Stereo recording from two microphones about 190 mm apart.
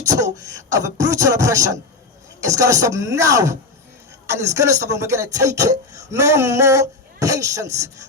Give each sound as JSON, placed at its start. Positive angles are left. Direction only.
{"t": 0.0, "sound": "beatboxing", "side_deg": -20}
{"t": 0.4, "sound": "speech", "side_deg": -15}